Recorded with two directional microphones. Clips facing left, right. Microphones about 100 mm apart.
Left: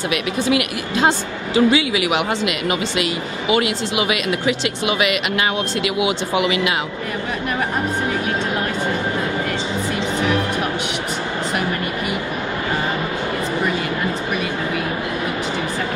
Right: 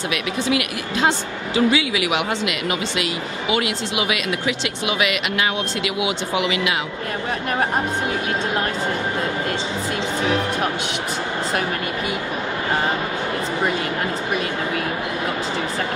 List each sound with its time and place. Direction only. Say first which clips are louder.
0.1 s speech: left 3 dB; 55° left (ahead or behind)
0.9 s a woman's voice: left 2 dB; centre (ahead or behind)
5.8 s speech: left 3 dB; 55° left (ahead or behind)
6.0 s a woman's voice: left 2 dB; centre (ahead or behind)